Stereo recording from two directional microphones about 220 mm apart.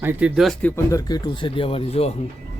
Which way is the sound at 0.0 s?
10° right (ahead or behind).